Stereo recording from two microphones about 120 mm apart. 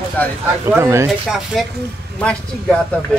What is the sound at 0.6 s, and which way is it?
Speech, 20° right (ahead or behind).